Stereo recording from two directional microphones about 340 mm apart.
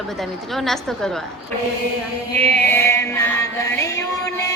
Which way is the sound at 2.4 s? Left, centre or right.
Centre.